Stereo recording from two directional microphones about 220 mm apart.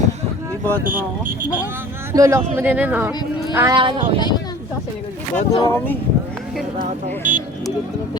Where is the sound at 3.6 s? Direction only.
20° right (ahead or behind).